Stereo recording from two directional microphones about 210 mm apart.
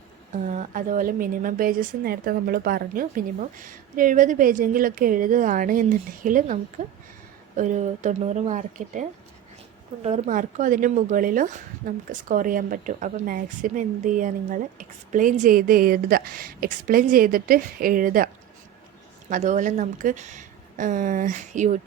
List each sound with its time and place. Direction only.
0.4 s speech: 35° right (ahead or behind)
19.3 s speech: 35° right (ahead or behind)